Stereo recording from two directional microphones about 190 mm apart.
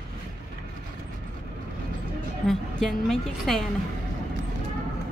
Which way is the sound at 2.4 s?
Centre (ahead or behind).